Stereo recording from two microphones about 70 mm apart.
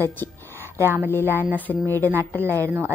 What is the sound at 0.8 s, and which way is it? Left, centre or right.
Speech, right.